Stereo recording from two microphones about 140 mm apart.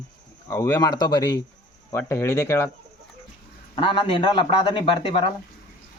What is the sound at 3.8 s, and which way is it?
Speech, 40° left (ahead or behind).